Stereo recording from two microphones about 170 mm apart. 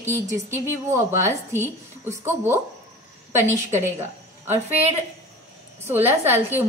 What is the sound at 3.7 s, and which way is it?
Speech, 15° right (ahead or behind).